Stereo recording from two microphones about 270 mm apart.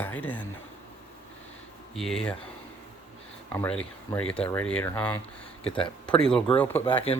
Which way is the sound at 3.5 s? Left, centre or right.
Centre.